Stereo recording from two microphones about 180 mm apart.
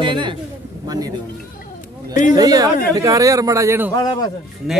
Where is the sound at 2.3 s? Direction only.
20° right (ahead or behind).